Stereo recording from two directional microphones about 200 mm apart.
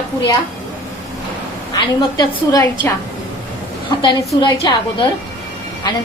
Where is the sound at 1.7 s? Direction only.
20° left (ahead or behind).